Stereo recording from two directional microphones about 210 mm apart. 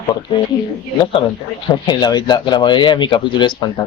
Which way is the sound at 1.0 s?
25° left (ahead or behind).